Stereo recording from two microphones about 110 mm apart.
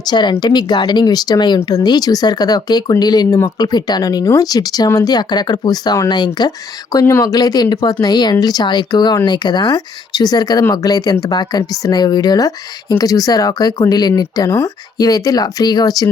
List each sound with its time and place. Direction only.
0.0 s speech: 40° left (ahead or behind)
7.0 s speech: 25° left (ahead or behind)